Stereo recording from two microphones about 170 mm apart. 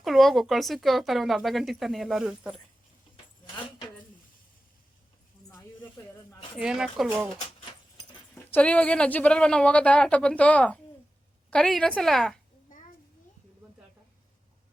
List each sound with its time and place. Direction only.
0.0 s speech: centre (ahead or behind)
5.5 s a sound: 15° left (ahead or behind)
6.6 s speech: 5° right (ahead or behind)
8.5 s speech: 5° left (ahead or behind)